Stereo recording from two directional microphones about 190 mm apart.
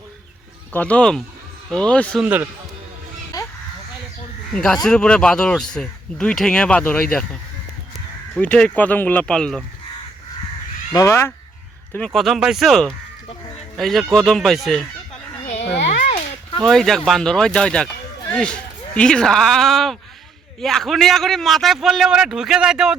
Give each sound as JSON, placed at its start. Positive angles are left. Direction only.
{"t": 0.7, "sound": "a man's voice", "side_deg": 10}
{"t": 2.2, "sound": "speech", "side_deg": -10}
{"t": 4.5, "sound": "a man's voice", "side_deg": 5}
{"t": 8.4, "sound": "speech", "side_deg": 5}
{"t": 10.9, "sound": "a man's voice", "side_deg": 15}
{"t": 15.6, "sound": "a sound", "side_deg": 30}
{"t": 16.6, "sound": "a man's voice", "side_deg": 0}